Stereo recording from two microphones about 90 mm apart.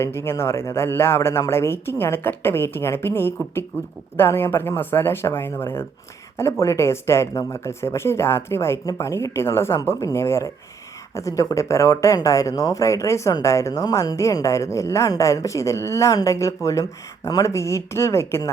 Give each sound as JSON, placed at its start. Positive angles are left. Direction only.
{"t": 0.0, "sound": "a woman's voice", "side_deg": 30}